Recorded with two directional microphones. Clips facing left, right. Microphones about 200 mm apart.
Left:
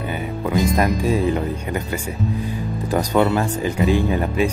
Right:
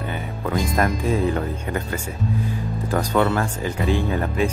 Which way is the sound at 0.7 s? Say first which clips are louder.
Left 2 dB; 15° left (ahead or behind).